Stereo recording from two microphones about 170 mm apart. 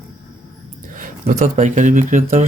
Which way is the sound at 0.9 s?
50° right (ahead or behind).